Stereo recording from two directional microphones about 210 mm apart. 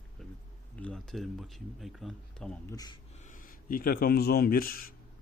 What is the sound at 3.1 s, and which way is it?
Speech, 40° left (ahead or behind).